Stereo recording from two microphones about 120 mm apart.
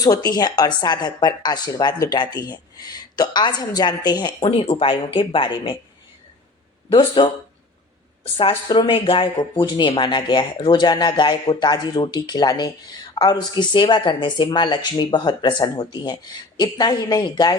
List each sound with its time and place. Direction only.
0.0 s speech: 30° left (ahead or behind)
6.9 s speech: 40° left (ahead or behind)
8.4 s speech: 45° left (ahead or behind)